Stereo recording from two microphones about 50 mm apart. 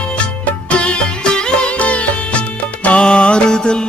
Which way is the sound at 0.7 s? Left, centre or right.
Left.